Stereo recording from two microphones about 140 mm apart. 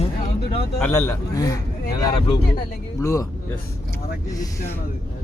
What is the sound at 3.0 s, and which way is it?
Speech, 20° left (ahead or behind).